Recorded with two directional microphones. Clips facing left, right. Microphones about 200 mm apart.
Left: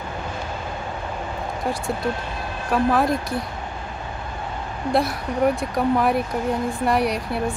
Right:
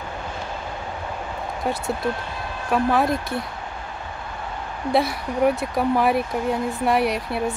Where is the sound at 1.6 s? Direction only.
Centre (ahead or behind).